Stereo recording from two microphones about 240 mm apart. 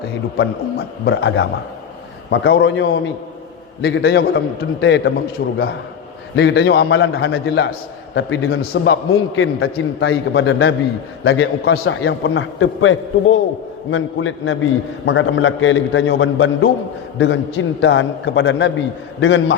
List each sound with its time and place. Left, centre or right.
0.3 s a man's voice: left
2.3 s a man's voice: left
10.1 s a man's voice: left
11.7 s a man's voice: left